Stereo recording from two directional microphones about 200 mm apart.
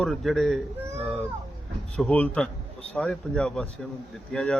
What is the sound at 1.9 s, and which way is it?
Speech, 5° left (ahead or behind).